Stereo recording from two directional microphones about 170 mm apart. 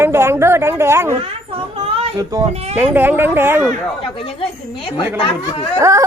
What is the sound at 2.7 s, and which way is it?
Speech, 10° right (ahead or behind).